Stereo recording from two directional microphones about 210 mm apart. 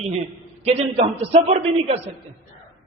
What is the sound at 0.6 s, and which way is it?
A man's voice, 30° right (ahead or behind).